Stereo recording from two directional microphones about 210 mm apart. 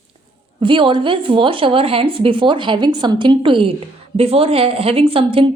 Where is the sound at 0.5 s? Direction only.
25° right (ahead or behind).